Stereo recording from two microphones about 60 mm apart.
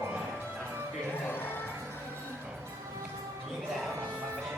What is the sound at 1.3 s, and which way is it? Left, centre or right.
Music, left.